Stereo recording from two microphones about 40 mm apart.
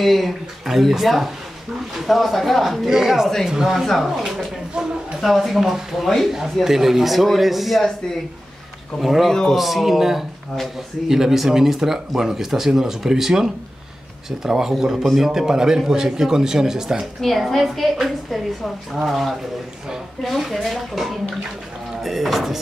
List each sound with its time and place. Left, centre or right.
0.0 s a woman's voice: centre
2.9 s speech: centre
3.7 s a woman's voice: centre
4.7 s a woman's voice: right
5.2 s a woman's voice: centre
5.6 s a woman's voice: centre
9.0 s a woman's voice: centre
9.3 s speech: centre
9.6 s a woman's voice: centre
17.0 s a woman's voice: centre